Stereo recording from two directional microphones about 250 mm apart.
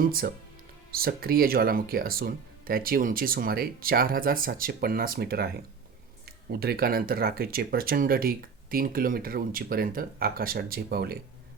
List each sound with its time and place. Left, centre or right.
0.0 s speech: right